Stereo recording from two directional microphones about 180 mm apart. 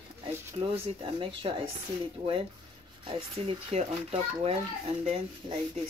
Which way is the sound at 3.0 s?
30° right (ahead or behind).